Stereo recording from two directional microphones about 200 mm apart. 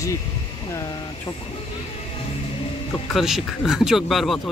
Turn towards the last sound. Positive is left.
turn(degrees=0)  # may be behind; listen again after turning